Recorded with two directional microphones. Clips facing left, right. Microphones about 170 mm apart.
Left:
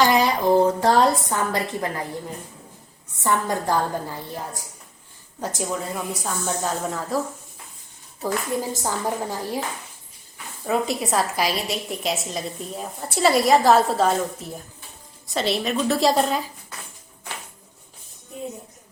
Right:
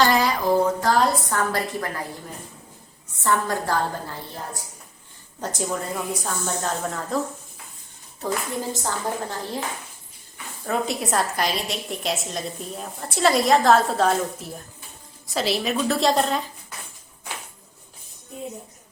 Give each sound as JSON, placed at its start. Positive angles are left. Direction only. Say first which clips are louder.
{"t": 0.0, "sound": "a sound", "louder": "left 1 dB", "side_deg": 20}
{"t": 1.1, "sound": "a woman's voice", "louder": "even", "side_deg": 20}
{"t": 3.2, "sound": "a woman's voice", "louder": "left 1 dB", "side_deg": 20}
{"t": 5.4, "sound": "a woman's voice", "louder": "even", "side_deg": 0}
{"t": 8.2, "sound": "a woman's voice", "louder": "left 2 dB", "side_deg": 0}
{"t": 10.7, "sound": "a woman's voice", "louder": "left 2 dB", "side_deg": 0}